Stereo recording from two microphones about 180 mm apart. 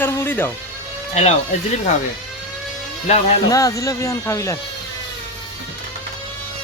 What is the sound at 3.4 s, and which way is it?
Speech, 20° left (ahead or behind).